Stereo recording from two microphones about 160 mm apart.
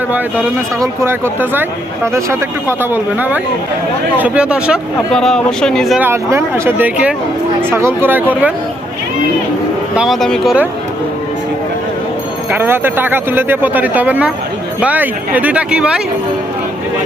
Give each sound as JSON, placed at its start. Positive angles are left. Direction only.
{"t": 1.0, "sound": "speech", "side_deg": -15}
{"t": 6.0, "sound": "speech", "side_deg": -15}
{"t": 9.9, "sound": "speech", "side_deg": -5}
{"t": 12.5, "sound": "speech", "side_deg": -15}